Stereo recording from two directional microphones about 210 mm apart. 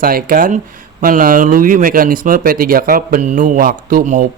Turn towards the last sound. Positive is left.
turn(degrees=-40)  # may be behind; listen again after turning